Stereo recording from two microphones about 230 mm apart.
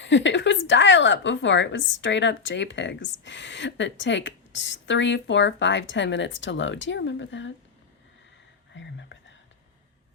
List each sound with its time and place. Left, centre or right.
0.0 s a woman's voice: left
8.7 s speech: left